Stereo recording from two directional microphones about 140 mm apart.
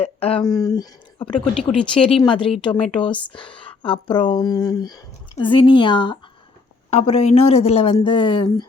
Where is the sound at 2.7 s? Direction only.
5° left (ahead or behind).